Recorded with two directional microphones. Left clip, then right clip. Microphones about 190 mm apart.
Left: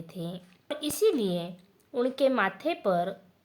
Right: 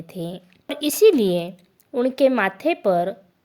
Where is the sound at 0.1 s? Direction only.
35° right (ahead or behind).